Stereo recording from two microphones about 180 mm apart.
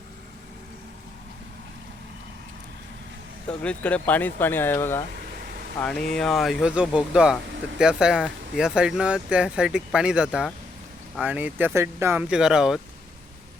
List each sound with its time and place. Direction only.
3.6 s speech: 5° left (ahead or behind)
5.2 s vehicle: 55° right (ahead or behind)
5.8 s speech: 5° left (ahead or behind); by 12.2 s 15° right (ahead or behind)
12.3 s speech: 5° right (ahead or behind)